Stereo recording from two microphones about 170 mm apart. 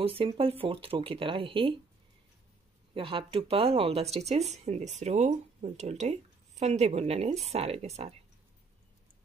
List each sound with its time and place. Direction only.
0.0 s speech: 30° right (ahead or behind)
2.9 s speech: 30° right (ahead or behind)